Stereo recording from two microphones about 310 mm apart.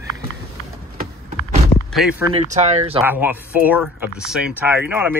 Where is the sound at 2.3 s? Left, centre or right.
Right.